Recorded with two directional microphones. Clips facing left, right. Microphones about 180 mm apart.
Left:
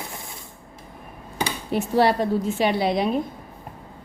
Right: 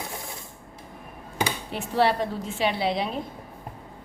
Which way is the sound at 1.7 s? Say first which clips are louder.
Left 5 dB; 40° left (ahead or behind).